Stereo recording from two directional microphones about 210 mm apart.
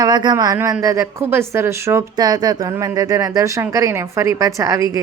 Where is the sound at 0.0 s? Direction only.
20° right (ahead or behind).